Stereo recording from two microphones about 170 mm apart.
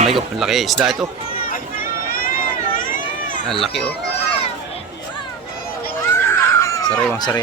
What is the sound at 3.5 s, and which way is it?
Speech, centre (ahead or behind).